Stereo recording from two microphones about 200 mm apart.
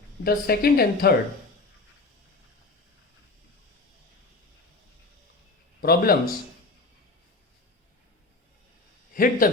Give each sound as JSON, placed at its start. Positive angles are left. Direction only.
{"t": 0.3, "sound": "a woman's voice", "side_deg": 50}
{"t": 5.8, "sound": "a woman's voice", "side_deg": 50}
{"t": 9.1, "sound": "a woman's voice", "side_deg": 45}